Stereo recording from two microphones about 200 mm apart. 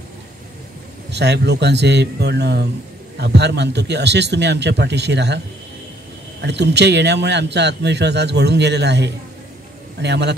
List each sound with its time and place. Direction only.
1.1 s a man's voice: 55° right (ahead or behind)
6.4 s a man's voice: 55° right (ahead or behind)